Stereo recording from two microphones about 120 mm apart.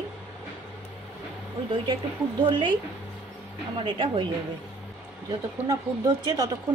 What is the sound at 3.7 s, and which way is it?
Speech, 45° right (ahead or behind).